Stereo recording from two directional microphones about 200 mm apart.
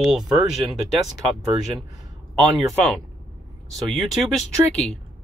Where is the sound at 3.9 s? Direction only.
Centre (ahead or behind).